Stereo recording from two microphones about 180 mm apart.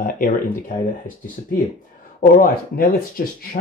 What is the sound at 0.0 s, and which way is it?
Speech, 50° left (ahead or behind).